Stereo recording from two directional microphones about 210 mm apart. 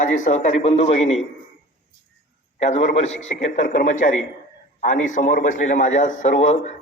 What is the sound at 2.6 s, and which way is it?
A man's voice, 30° left (ahead or behind).